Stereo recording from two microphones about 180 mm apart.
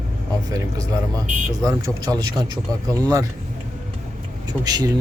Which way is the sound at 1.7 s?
20° right (ahead or behind).